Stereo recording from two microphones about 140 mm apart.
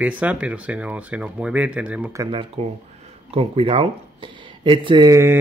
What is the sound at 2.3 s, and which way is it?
Speech, 40° right (ahead or behind).